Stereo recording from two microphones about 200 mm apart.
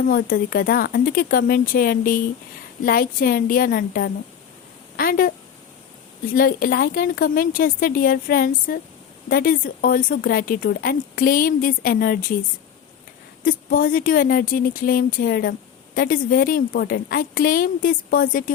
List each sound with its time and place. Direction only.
0.1 s speech: 45° left (ahead or behind)
6.3 s speech: 45° left (ahead or behind)
13.4 s speech: 45° left (ahead or behind)